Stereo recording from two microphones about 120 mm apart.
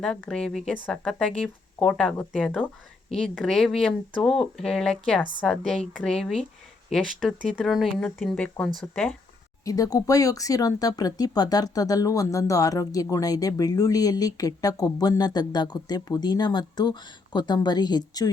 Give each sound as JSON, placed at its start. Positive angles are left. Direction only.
{"t": 0.0, "sound": "speech", "side_deg": 5}
{"t": 9.6, "sound": "speech", "side_deg": 30}